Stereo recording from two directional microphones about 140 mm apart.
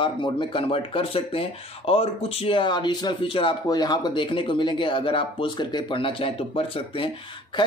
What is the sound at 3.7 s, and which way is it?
Speech, 30° left (ahead or behind).